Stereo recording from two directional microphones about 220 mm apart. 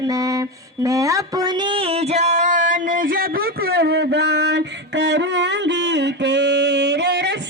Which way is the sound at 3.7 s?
45° right (ahead or behind).